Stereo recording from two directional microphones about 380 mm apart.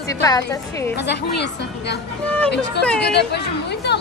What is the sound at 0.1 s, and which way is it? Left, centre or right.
Speech, centre.